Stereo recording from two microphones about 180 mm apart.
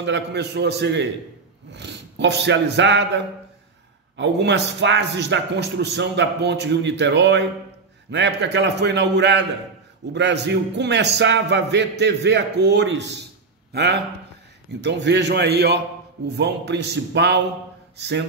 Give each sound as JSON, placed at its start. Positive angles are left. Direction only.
{"t": 0.0, "sound": "a man's voice", "side_deg": -75}
{"t": 4.2, "sound": "a man's voice", "side_deg": -75}